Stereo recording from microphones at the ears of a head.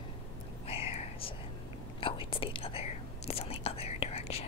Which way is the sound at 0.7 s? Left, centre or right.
Left.